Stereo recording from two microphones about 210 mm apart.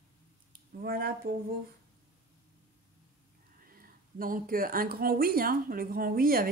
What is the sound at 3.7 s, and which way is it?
Speech, 45° right (ahead or behind).